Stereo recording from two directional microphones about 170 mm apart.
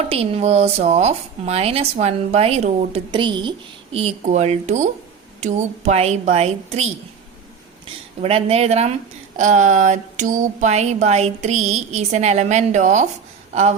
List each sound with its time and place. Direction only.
0.1 s a woman's voice: 35° right (ahead or behind)
3.9 s a woman's voice: 40° right (ahead or behind)
8.2 s a woman's voice: 35° right (ahead or behind)
13.5 s a sound: 40° right (ahead or behind)